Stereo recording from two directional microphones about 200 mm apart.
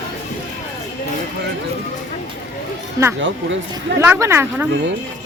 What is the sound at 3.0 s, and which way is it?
Speech, 15° right (ahead or behind).